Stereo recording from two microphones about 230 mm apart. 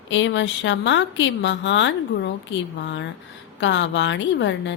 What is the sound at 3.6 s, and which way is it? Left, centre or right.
Speech, left.